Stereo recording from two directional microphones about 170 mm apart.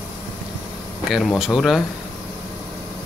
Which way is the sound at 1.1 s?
Centre (ahead or behind).